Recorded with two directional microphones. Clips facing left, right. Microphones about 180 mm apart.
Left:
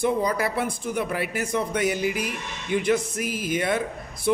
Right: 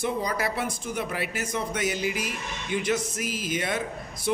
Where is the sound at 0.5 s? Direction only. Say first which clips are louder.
Left 4 dB; 55° left (ahead or behind).